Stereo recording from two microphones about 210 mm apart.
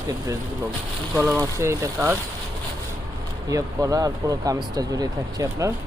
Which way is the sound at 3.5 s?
15° right (ahead or behind).